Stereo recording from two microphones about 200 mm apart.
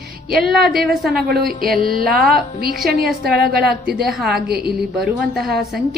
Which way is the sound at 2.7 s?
Centre (ahead or behind).